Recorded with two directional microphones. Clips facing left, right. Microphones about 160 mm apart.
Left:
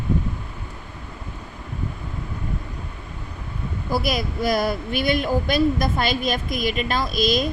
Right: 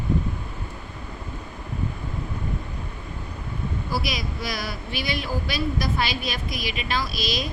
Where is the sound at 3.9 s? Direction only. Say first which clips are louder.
Left 7 dB; 50° left (ahead or behind).